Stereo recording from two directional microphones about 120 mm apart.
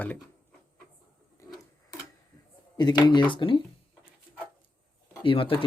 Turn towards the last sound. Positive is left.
turn(degrees=50)  # may be behind; listen again after turning